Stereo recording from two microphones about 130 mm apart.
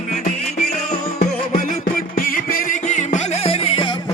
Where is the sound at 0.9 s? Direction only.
75° left (ahead or behind); by 3.9 s 40° left (ahead or behind).